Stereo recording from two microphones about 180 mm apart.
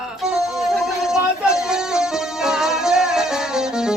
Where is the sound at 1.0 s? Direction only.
5° right (ahead or behind).